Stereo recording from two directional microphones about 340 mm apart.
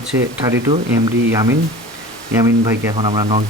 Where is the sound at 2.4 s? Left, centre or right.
Centre.